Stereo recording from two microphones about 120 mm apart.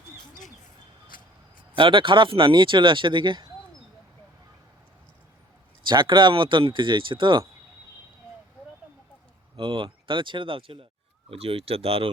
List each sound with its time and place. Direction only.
1.7 s speech: 45° right (ahead or behind)
5.9 s speech: 40° right (ahead or behind)
9.6 s speech: 45° right (ahead or behind)